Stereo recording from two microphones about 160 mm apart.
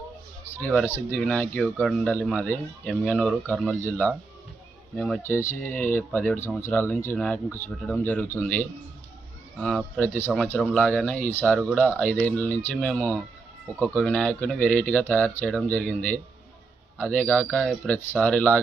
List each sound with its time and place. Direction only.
0.9 s speech: 15° left (ahead or behind)
5.2 s speech: 15° left (ahead or behind)